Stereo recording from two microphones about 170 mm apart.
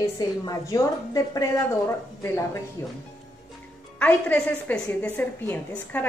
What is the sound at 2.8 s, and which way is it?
Speech, 20° left (ahead or behind).